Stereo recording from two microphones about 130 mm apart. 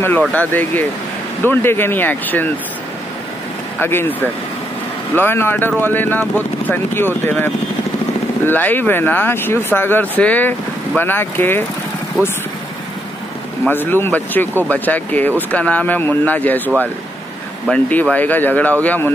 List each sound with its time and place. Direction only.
0.3 s speech: 15° left (ahead or behind)
3.8 s speech: 15° left (ahead or behind)
8.5 s speech: 15° left (ahead or behind)
13.7 s speech: 15° left (ahead or behind)